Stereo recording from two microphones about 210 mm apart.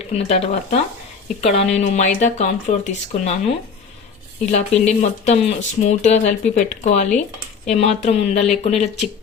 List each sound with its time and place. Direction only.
0.1 s speech: 30° left (ahead or behind)
4.5 s speech: 35° left (ahead or behind)